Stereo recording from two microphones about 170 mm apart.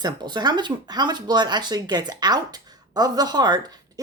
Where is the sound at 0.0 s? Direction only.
25° right (ahead or behind).